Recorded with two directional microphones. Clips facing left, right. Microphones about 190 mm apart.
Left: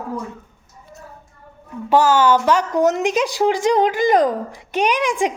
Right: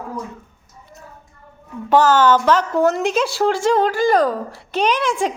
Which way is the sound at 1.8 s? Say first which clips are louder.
Right 1 dB; 10° left (ahead or behind).